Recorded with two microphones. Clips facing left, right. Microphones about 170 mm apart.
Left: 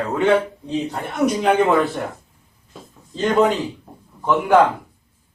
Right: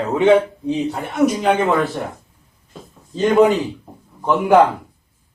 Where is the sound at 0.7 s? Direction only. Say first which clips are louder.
Right 2 dB; 5° right (ahead or behind).